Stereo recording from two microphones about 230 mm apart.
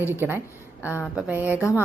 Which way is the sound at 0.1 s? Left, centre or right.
Centre.